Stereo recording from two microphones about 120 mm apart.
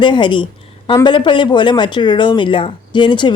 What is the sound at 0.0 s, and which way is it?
Speech, 40° left (ahead or behind).